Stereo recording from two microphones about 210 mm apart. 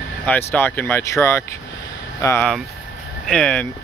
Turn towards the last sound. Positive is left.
turn(degrees=5)  # may be behind; listen again after turning